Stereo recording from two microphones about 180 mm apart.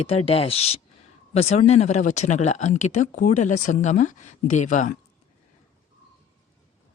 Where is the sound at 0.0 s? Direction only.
35° left (ahead or behind).